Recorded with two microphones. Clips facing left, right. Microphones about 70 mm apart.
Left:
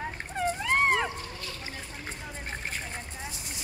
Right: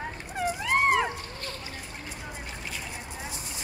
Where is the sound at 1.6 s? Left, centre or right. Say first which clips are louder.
Even; left.